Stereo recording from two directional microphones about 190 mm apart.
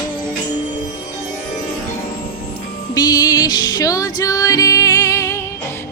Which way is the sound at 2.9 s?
20° left (ahead or behind).